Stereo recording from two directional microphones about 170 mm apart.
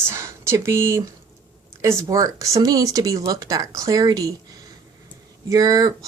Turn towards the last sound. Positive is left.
turn(degrees=-20)  # may be behind; listen again after turning